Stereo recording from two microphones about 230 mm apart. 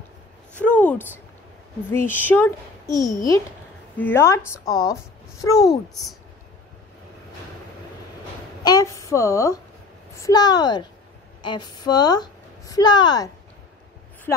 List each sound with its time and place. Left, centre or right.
0.6 s a woman's voice: centre
8.6 s a woman's voice: centre